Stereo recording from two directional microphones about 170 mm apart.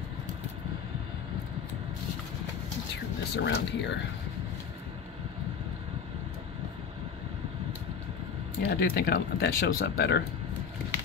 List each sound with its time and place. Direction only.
3.3 s speech: 80° left
8.6 s speech: 65° left (ahead or behind)